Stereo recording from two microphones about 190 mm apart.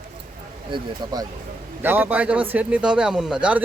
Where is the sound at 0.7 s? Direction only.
25° right (ahead or behind).